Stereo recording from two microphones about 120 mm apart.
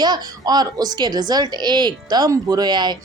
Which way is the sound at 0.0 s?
35° right (ahead or behind).